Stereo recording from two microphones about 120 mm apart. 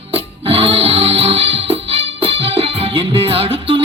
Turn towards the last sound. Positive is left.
turn(degrees=-50)  # may be behind; listen again after turning